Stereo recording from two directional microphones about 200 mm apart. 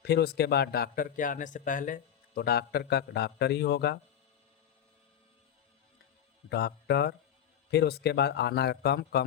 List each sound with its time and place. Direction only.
0.0 s speech: 55° left (ahead or behind)
6.5 s a man's voice: 55° left (ahead or behind)